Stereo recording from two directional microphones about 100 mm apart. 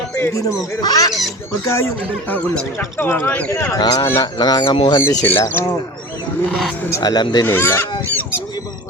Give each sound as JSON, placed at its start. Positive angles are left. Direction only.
{"t": 0.2, "sound": "speech", "side_deg": 30}
{"t": 0.8, "sound": "speech", "side_deg": 40}
{"t": 1.6, "sound": "speech", "side_deg": 30}
{"t": 3.0, "sound": "speech", "side_deg": 20}
{"t": 3.5, "sound": "speech", "side_deg": 30}
{"t": 3.8, "sound": "speech", "side_deg": 40}
{"t": 5.2, "sound": "speech", "side_deg": 20}
{"t": 6.9, "sound": "speech", "side_deg": 40}
{"t": 7.4, "sound": "speech", "side_deg": 20}